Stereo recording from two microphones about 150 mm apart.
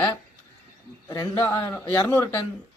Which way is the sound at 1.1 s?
20° left (ahead or behind).